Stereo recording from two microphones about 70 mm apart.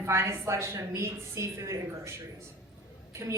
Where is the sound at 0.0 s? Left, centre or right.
Right.